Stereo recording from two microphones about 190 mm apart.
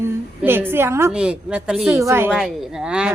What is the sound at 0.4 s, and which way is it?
A woman's voice, 10° right (ahead or behind).